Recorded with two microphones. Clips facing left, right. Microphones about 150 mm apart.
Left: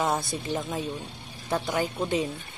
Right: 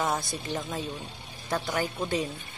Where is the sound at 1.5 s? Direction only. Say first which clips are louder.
Left 2 dB; 15° left (ahead or behind).